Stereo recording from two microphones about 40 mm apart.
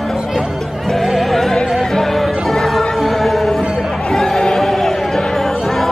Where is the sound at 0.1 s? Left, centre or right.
Centre.